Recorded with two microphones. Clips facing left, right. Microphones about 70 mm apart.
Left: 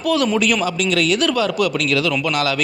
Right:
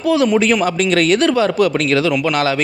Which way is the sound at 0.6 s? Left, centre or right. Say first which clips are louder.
Right 4 dB; right.